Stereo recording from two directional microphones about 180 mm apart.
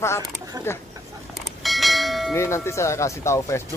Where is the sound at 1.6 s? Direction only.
Centre (ahead or behind).